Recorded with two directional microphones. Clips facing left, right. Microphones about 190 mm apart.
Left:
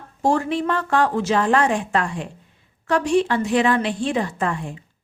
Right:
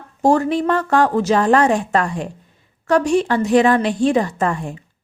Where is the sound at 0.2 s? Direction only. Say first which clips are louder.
Right 5 dB; 40° right (ahead or behind).